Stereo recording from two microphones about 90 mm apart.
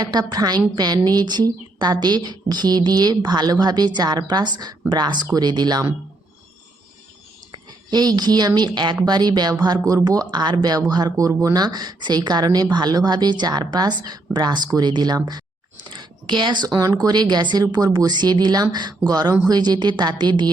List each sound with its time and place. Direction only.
0.0 s a woman's voice: 45° right (ahead or behind)
7.9 s a woman's voice: 50° right (ahead or behind)